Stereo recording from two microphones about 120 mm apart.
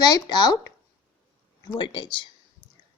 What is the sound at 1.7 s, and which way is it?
Speech, 40° left (ahead or behind).